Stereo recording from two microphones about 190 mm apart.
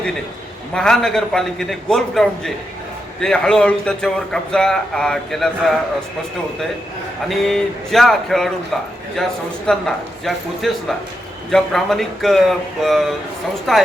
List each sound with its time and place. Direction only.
0.7 s a man's voice: 5° left (ahead or behind)
7.3 s a man's voice: centre (ahead or behind)